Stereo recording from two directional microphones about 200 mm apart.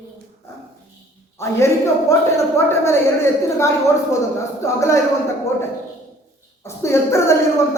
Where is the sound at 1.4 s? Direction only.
15° left (ahead or behind).